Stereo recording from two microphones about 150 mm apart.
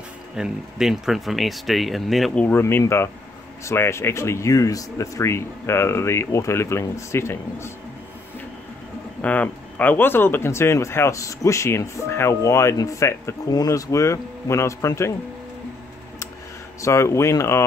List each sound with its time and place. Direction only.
0.4 s speech: 5° right (ahead or behind)
2.4 s speech: 15° left (ahead or behind)
9.2 s speech: 10° left (ahead or behind)
16.8 s speech: 20° left (ahead or behind)